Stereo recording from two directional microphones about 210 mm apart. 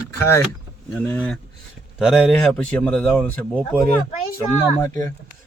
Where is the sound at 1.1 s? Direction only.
5° left (ahead or behind).